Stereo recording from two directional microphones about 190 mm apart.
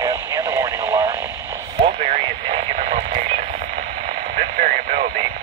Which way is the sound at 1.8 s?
40° right (ahead or behind).